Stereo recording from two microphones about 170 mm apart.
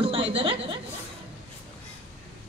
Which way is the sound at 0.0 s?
35° right (ahead or behind).